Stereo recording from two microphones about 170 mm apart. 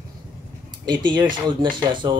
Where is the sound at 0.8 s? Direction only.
25° right (ahead or behind).